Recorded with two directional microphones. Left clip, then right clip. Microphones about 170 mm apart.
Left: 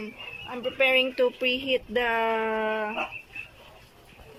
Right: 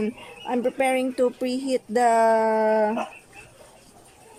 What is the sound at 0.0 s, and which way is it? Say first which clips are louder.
Speech: right 7 dB; 55° right (ahead or behind).